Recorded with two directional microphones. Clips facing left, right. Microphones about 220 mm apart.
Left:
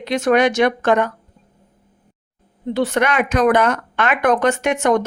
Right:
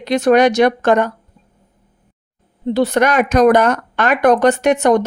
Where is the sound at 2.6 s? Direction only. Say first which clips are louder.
Right 4 dB; 35° right (ahead or behind).